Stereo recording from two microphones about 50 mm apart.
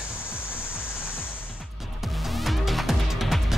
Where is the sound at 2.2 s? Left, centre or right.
Centre.